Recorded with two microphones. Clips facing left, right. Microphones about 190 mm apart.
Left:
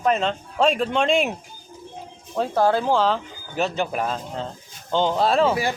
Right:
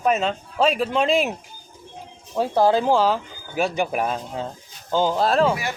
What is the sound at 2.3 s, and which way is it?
Speech, 10° right (ahead or behind).